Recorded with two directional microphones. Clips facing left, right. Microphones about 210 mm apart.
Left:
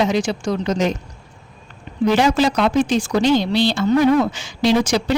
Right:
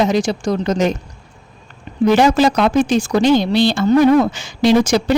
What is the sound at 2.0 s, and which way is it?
A woman's voice, 50° right (ahead or behind).